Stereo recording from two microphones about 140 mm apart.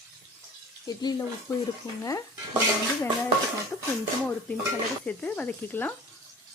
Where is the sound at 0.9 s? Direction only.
25° left (ahead or behind).